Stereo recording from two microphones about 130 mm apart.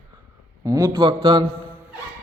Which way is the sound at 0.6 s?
25° right (ahead or behind).